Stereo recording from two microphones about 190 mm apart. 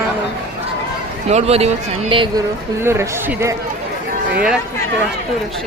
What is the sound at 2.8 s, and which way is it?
Speech, 15° right (ahead or behind).